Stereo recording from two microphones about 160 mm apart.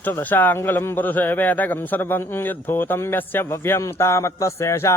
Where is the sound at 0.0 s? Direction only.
10° left (ahead or behind).